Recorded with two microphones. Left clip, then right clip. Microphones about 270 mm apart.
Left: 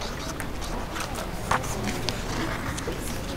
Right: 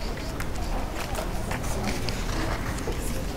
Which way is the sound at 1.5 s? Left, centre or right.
Left.